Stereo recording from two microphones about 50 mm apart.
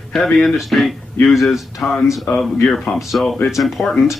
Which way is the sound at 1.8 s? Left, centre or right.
Centre.